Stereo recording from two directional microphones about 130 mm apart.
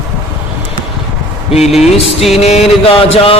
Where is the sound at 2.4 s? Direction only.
55° left (ahead or behind).